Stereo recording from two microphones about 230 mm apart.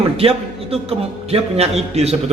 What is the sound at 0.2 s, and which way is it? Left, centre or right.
A man's voice, right.